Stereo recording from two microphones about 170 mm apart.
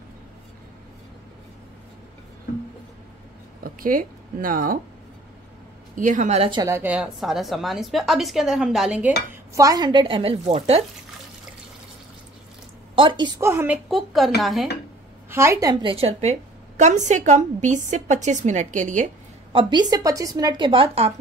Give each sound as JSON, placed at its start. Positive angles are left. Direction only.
{"t": 3.6, "sound": "speech", "side_deg": -55}
{"t": 5.9, "sound": "a woman's voice", "side_deg": -50}
{"t": 6.6, "sound": "a woman's voice", "side_deg": -15}
{"t": 9.6, "sound": "a woman's voice", "side_deg": -20}
{"t": 12.9, "sound": "a woman's voice", "side_deg": -30}
{"t": 13.4, "sound": "a woman's voice", "side_deg": -15}
{"t": 13.8, "sound": "a woman's voice", "side_deg": 0}
{"t": 15.2, "sound": "a woman's voice", "side_deg": -15}
{"t": 19.5, "sound": "a woman's voice", "side_deg": -30}